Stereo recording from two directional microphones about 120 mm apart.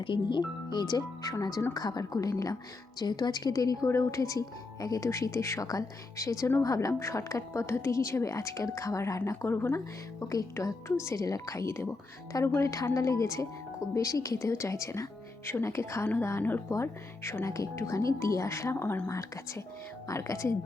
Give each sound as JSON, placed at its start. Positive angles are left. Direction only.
{"t": 0.0, "sound": "speech", "side_deg": 40}